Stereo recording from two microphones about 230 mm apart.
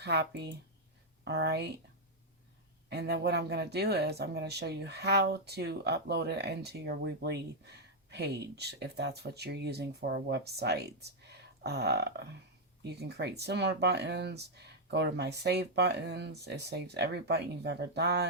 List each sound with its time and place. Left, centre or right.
0.0 s speech: right
2.9 s speech: right